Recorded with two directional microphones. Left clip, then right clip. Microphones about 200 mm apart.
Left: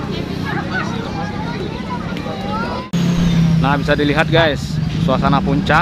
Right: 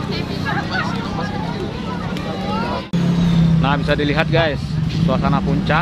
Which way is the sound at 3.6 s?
10° left (ahead or behind).